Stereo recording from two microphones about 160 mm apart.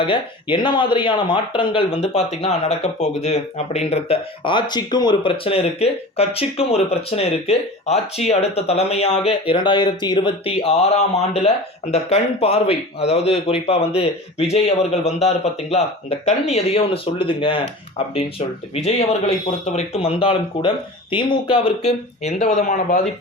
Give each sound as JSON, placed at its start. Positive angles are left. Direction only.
{"t": 0.0, "sound": "speech", "side_deg": 30}